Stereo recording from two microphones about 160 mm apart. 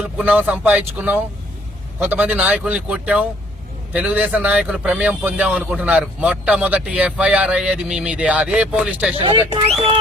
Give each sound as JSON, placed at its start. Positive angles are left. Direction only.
{"t": 0.2, "sound": "speech", "side_deg": -10}
{"t": 9.1, "sound": "speech", "side_deg": -35}